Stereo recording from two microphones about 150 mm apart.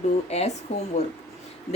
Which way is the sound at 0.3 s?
45° left (ahead or behind).